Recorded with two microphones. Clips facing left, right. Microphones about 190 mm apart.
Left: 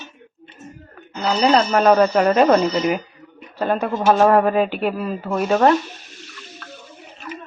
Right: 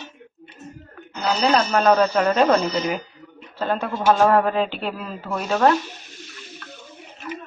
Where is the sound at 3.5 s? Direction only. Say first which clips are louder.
Left 4 dB; 15° left (ahead or behind).